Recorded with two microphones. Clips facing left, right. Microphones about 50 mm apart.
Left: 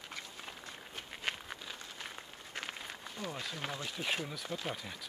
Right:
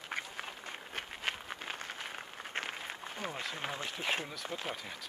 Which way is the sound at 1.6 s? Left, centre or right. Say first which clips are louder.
Right 4 dB; right.